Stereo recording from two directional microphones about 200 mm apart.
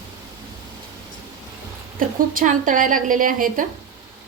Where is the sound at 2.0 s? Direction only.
45° right (ahead or behind).